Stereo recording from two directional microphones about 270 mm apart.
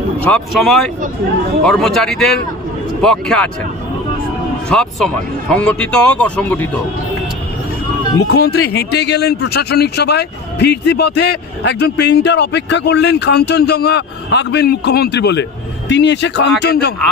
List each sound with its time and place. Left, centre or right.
0.2 s speech: centre
4.6 s speech: centre
8.3 s a man's voice: left